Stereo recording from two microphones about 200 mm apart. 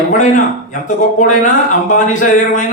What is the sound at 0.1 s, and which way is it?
A man's voice, 40° left (ahead or behind).